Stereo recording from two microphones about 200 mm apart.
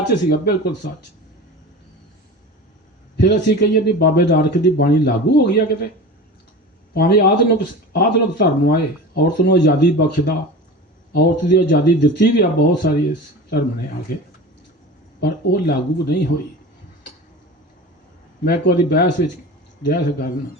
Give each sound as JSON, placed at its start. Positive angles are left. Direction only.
{"t": 0.0, "sound": "speech", "side_deg": 55}
{"t": 3.2, "sound": "speech", "side_deg": 60}
{"t": 6.9, "sound": "speech", "side_deg": 55}
{"t": 15.2, "sound": "speech", "side_deg": 55}
{"t": 18.4, "sound": "speech", "side_deg": 50}